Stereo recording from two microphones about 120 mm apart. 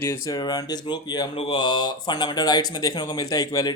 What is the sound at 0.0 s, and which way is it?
Speech, 30° left (ahead or behind).